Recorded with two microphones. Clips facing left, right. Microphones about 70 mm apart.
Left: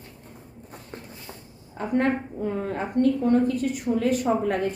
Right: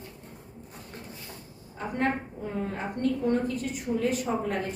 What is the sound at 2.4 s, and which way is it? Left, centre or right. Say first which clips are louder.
A woman's voice: left 5 dB; left.